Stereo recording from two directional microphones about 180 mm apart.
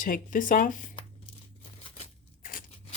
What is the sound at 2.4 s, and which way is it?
Scissors, 50° left (ahead or behind).